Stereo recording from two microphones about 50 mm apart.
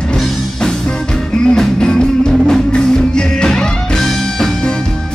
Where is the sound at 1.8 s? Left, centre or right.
Centre.